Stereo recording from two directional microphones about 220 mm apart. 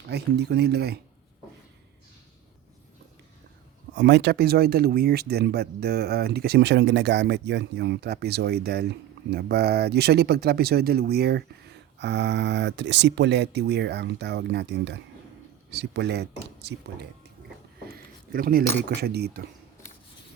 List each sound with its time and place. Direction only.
0.1 s speech: 50° right (ahead or behind)
3.9 s speech: 50° right (ahead or behind)
17.9 s a sound: 40° right (ahead or behind)
18.8 s speech: 50° right (ahead or behind)